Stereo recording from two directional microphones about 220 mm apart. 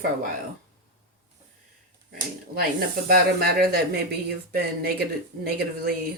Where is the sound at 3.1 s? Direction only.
45° right (ahead or behind).